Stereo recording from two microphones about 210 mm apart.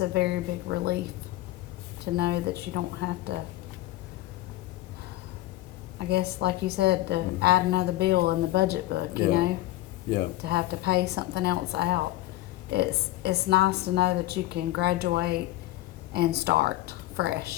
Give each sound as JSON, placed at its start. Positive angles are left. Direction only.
{"t": 0.0, "sound": "a woman's voice", "side_deg": -55}
{"t": 2.1, "sound": "a woman's voice", "side_deg": -50}
{"t": 6.0, "sound": "a woman's voice", "side_deg": -50}